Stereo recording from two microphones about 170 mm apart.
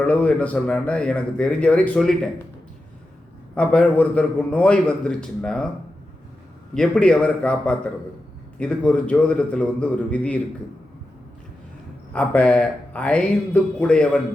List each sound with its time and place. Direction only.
0.0 s speech: 10° left (ahead or behind)
3.5 s speech: 5° left (ahead or behind)
6.7 s a man's voice: 5° left (ahead or behind)
12.1 s speech: 10° left (ahead or behind)